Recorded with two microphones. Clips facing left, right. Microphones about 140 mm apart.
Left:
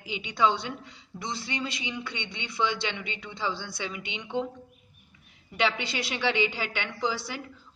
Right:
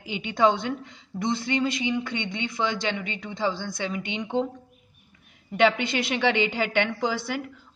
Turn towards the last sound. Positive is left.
turn(degrees=-55)  # may be behind; listen again after turning